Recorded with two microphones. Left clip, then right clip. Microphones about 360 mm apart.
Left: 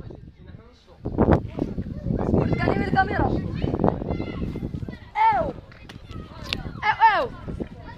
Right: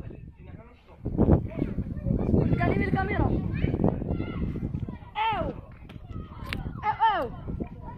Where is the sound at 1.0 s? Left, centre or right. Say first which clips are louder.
Left 5 dB; left.